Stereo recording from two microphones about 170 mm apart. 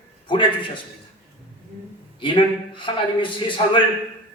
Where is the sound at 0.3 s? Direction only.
30° left (ahead or behind).